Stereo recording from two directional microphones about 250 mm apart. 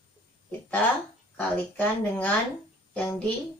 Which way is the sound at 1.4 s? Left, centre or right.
Centre.